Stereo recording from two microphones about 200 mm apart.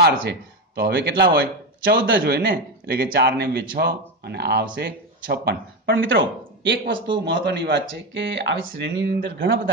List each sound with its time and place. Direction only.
0.0 s speech: 55° right (ahead or behind)